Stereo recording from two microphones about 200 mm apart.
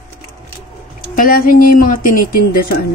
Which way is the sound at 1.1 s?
45° left (ahead or behind).